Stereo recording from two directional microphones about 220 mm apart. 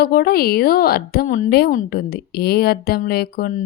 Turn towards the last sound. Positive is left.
turn(degrees=40)  # may be behind; listen again after turning